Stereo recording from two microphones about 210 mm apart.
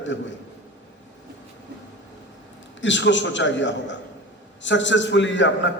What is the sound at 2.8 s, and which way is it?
A man's voice, 60° left (ahead or behind).